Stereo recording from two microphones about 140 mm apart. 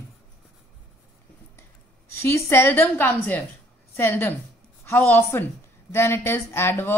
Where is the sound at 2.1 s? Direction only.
20° left (ahead or behind).